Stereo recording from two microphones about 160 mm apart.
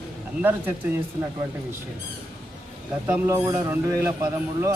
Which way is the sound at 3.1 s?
15° right (ahead or behind).